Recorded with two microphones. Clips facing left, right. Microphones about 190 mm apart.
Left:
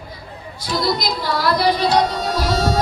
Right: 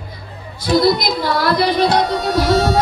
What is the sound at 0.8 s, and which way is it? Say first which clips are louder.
Music: right 6 dB; 60° right (ahead or behind).